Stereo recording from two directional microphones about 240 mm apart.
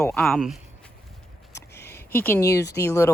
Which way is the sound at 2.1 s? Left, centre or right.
Centre.